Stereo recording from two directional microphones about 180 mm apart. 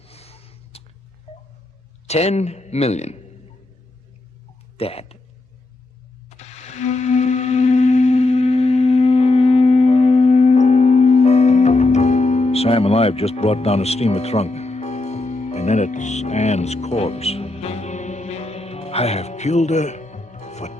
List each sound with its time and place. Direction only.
0.0 s a sound: 35° left (ahead or behind)
2.0 s speech: 35° left (ahead or behind)
4.8 s speech: 35° left (ahead or behind)
6.3 s music: 35° left (ahead or behind)